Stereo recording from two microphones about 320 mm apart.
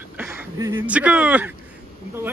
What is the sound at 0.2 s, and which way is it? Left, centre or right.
Speech, centre.